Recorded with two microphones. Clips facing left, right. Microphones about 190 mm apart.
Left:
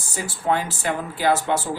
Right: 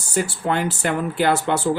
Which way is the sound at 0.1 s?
65° right (ahead or behind).